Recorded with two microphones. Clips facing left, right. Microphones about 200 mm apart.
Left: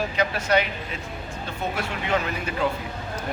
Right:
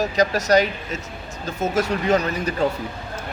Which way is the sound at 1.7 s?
40° right (ahead or behind).